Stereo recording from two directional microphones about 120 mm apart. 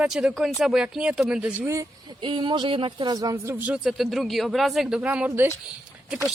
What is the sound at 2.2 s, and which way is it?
Speech, 45° right (ahead or behind).